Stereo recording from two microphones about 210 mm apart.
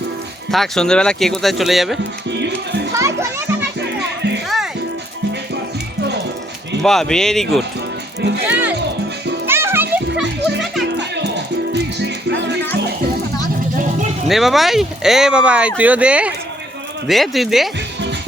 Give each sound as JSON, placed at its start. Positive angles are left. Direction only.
{"t": 0.5, "sound": "speech", "side_deg": 0}
{"t": 2.3, "sound": "music", "side_deg": -55}
{"t": 3.0, "sound": "children playing", "side_deg": -15}
{"t": 3.8, "sound": "music", "side_deg": -55}
{"t": 4.4, "sound": "music", "side_deg": 0}
{"t": 6.8, "sound": "speech", "side_deg": 0}
{"t": 9.5, "sound": "music", "side_deg": -10}
{"t": 10.9, "sound": "music", "side_deg": -55}
{"t": 14.3, "sound": "speech", "side_deg": 0}